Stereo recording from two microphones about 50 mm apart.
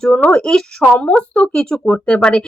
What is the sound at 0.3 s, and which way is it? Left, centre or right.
A woman's voice, centre.